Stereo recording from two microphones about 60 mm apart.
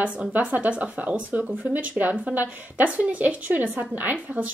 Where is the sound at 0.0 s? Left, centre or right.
Right.